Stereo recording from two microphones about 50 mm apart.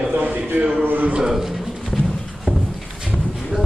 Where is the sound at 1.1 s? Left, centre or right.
Centre.